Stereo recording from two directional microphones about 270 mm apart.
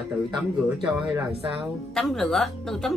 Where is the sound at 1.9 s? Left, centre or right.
Centre.